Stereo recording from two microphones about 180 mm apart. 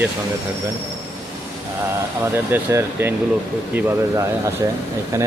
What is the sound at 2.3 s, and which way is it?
Speech, 15° right (ahead or behind).